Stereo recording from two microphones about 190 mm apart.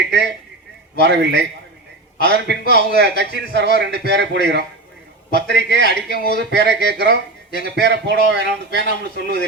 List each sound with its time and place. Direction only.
1.0 s a man's voice: 65° right (ahead or behind)